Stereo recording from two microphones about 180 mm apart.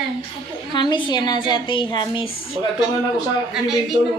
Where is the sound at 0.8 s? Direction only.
25° left (ahead or behind).